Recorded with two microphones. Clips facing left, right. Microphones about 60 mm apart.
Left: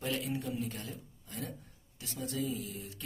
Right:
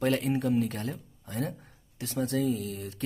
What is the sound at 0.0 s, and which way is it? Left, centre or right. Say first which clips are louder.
A man's voice: right 9 dB; right.